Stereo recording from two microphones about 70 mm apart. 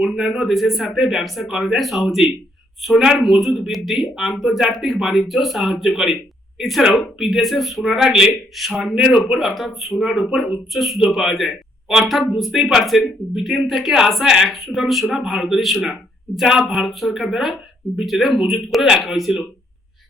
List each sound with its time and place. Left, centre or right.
0.2 s a woman's voice: centre